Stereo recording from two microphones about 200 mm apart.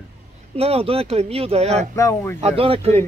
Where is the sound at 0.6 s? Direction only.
30° right (ahead or behind).